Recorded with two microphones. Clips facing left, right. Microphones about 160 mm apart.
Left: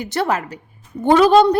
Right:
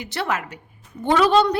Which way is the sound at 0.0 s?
40° left (ahead or behind).